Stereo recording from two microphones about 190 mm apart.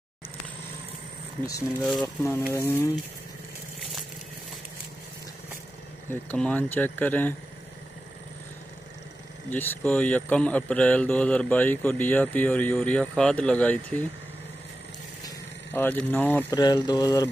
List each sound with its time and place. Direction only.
1.8 s speech: centre (ahead or behind)
2.5 s speech: 15° left (ahead or behind)
6.3 s speech: 5° left (ahead or behind)
9.5 s speech: 10° left (ahead or behind)
15.2 s speech: 10° left (ahead or behind)
16.5 s speech: 20° left (ahead or behind)